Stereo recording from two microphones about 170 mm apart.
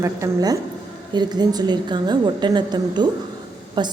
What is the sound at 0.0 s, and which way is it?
A woman's voice, 20° right (ahead or behind).